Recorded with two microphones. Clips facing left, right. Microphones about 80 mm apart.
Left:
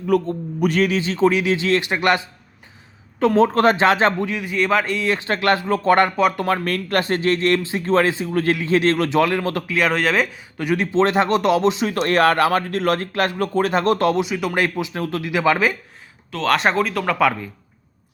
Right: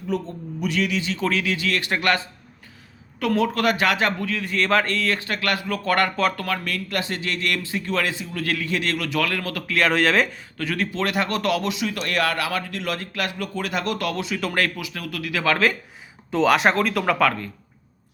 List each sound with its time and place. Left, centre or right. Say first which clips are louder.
0.1 s speech: left 8 dB; left
1.2 s speech: left 8 dB; left
3.2 s speech: left 6 dB; left
4.4 s speech: left 1 dB; centre
5.3 s speech: left 7 dB; left
6.7 s speech: left 7 dB; left
8.4 s speech: left 7 dB; left
9.6 s speech: right 2 dB; centre
10.6 s speech: left 7 dB; centre
14.2 s speech: left 4 dB; centre
16.5 s speech: left 2 dB; centre